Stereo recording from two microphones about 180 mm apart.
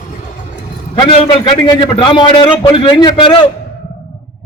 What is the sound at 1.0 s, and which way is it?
A man's voice, 30° left (ahead or behind).